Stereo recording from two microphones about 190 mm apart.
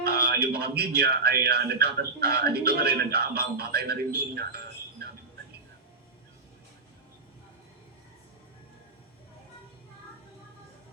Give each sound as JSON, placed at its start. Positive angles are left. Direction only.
{"t": 0.0, "sound": "speech", "side_deg": -55}